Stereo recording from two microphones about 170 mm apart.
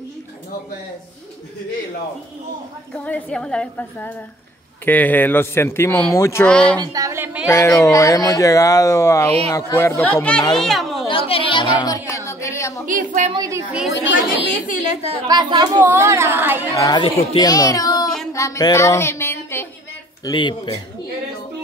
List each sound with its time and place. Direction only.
2.9 s speech: 5° left (ahead or behind)
6.5 s speech: 5° left (ahead or behind)
6.8 s speech: 20° right (ahead or behind)
7.4 s a child's voice: 15° left (ahead or behind); by 11.1 s centre (ahead or behind)
11.1 s a sound: 35° left (ahead or behind); by 12.8 s 15° left (ahead or behind)
12.8 s a woman's voice: 50° right (ahead or behind)
13.3 s speech: 20° right (ahead or behind)
14.5 s a woman's voice: 45° left (ahead or behind)
15.2 s speech: 25° right (ahead or behind)
15.8 s speech: 15° right (ahead or behind)
16.7 s speech: 20° left (ahead or behind)
18.3 s music: 20° left (ahead or behind)
20.2 s speech: 30° left (ahead or behind)